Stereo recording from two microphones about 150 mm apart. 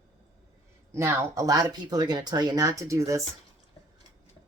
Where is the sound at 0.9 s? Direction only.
20° right (ahead or behind).